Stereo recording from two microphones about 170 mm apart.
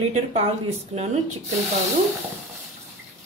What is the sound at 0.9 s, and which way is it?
Speech, 40° right (ahead or behind).